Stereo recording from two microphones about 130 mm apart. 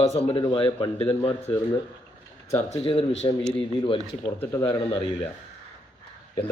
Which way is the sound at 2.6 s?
55° left (ahead or behind).